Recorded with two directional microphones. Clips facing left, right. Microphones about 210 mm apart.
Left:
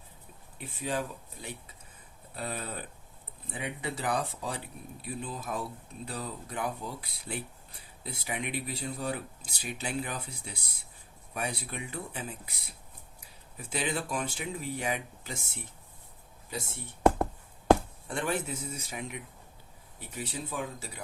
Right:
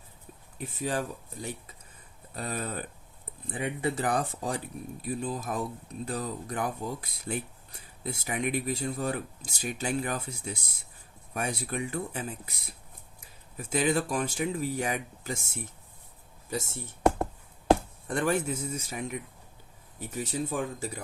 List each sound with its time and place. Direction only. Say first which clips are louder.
0.6 s speech: right 2 dB; 45° right (ahead or behind)
18.1 s speech: right 5 dB; 45° right (ahead or behind)